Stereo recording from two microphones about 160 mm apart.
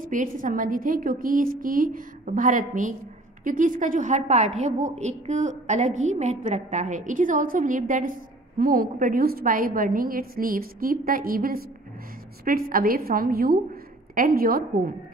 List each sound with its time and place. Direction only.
0.0 s a woman's voice: 55° right (ahead or behind)